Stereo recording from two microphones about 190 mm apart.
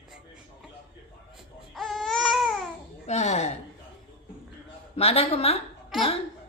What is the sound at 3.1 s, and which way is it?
Speech, 35° left (ahead or behind).